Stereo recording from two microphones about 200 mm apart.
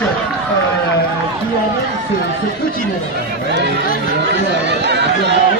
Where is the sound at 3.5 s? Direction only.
60° right (ahead or behind).